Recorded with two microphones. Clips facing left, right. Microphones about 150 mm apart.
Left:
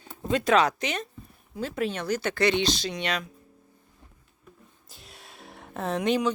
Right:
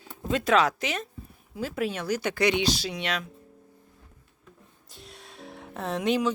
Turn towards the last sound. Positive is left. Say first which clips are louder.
# left 1 dB
turn(degrees=0)  # may be behind; listen again after turning